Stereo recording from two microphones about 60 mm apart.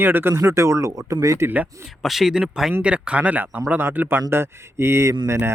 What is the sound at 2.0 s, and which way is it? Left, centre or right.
Speech, centre.